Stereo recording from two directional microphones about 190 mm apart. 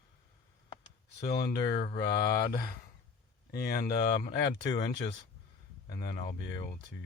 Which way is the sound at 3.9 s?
20° left (ahead or behind).